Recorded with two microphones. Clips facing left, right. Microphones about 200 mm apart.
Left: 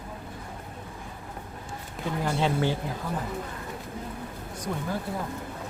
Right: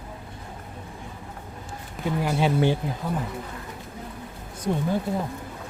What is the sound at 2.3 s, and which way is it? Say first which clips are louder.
Speech: right 4 dB; 15° right (ahead or behind).